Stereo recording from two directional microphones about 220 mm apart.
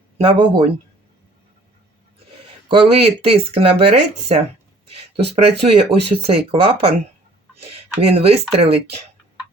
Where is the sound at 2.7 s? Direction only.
25° right (ahead or behind).